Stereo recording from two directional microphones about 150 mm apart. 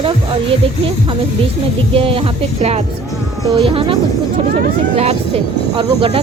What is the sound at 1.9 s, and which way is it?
Speech, 35° right (ahead or behind).